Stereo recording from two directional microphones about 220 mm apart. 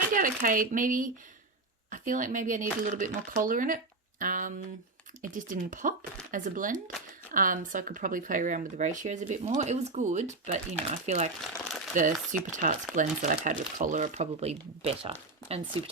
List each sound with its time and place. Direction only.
0.1 s speech: 40° right (ahead or behind)